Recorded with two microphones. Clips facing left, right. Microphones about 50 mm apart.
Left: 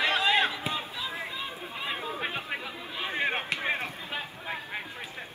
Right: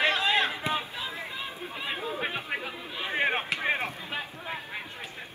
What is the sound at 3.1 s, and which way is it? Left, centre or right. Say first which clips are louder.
Chop: right 3 dB; right.